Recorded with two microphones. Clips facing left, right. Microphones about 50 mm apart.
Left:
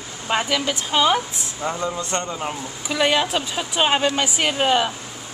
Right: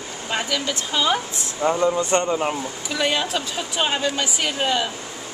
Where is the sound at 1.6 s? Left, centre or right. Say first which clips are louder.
Right 6 dB; centre.